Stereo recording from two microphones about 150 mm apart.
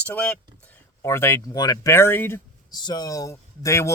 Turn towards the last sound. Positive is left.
turn(degrees=20)  # may be behind; listen again after turning